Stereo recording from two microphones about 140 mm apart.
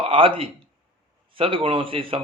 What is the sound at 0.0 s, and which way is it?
Speech, 40° right (ahead or behind).